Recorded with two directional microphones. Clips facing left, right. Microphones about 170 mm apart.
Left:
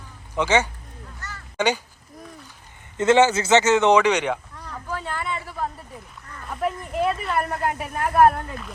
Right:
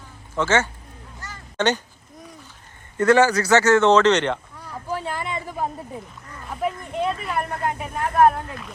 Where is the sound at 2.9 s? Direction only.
20° left (ahead or behind).